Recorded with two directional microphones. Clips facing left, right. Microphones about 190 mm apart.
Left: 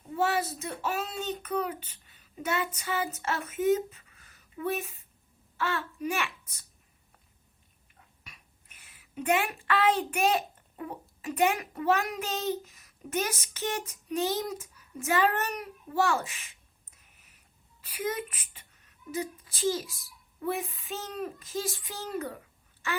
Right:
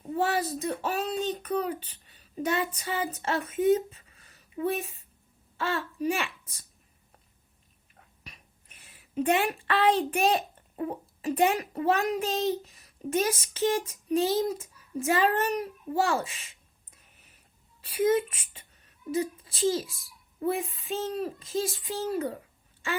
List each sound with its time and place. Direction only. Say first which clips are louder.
0.2 s a child's voice: right 1 dB; 35° right (ahead or behind)
8.3 s a woman's voice: right 2 dB; 30° right (ahead or behind)
17.8 s speech: right 9 dB; 25° right (ahead or behind)